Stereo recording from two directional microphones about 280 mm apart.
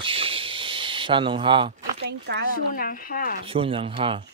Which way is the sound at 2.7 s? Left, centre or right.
Left.